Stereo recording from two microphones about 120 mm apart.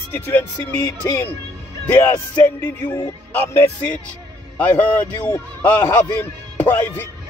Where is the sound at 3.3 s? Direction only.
15° left (ahead or behind).